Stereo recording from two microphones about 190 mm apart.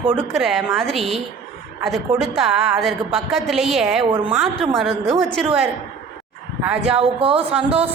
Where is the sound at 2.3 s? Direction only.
Centre (ahead or behind).